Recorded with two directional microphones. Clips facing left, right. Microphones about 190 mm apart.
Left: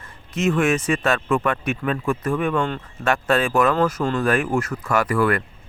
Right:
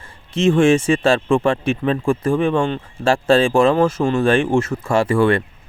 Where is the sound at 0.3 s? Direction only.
30° right (ahead or behind).